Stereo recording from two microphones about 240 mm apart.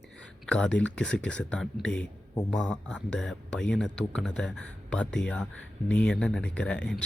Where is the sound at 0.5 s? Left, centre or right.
Centre.